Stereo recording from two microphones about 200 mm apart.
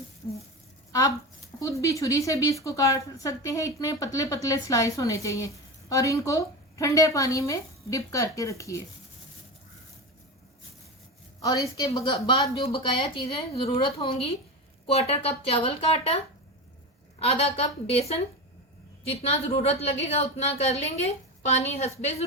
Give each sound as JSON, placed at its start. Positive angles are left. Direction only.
{"t": 1.5, "sound": "speech", "side_deg": 15}
{"t": 11.3, "sound": "a woman's voice", "side_deg": 20}
{"t": 19.2, "sound": "a woman's voice", "side_deg": 30}